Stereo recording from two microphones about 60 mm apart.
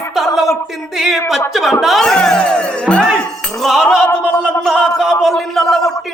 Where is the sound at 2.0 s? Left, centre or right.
Centre.